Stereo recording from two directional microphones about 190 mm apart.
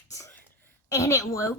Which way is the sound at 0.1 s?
15° left (ahead or behind).